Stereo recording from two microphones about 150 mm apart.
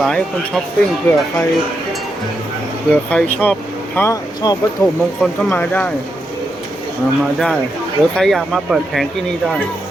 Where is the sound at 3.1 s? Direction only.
10° left (ahead or behind).